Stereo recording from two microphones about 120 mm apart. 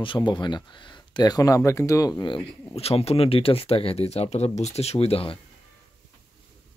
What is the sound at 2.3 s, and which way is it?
Speech, 55° left (ahead or behind).